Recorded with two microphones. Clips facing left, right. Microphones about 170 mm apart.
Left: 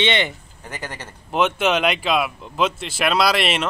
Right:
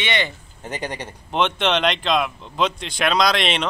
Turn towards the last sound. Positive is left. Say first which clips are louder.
# even
turn(degrees=5)  # may be behind; listen again after turning